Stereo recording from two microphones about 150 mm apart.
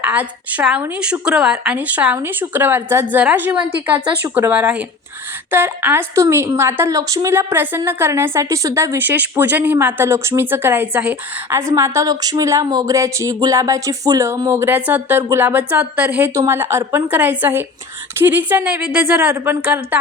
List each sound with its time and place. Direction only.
0.0 s a woman's voice: 10° right (ahead or behind)